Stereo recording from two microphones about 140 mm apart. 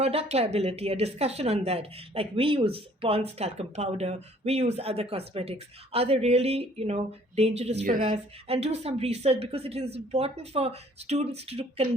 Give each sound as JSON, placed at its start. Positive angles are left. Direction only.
{"t": 0.0, "sound": "a woman's voice", "side_deg": -45}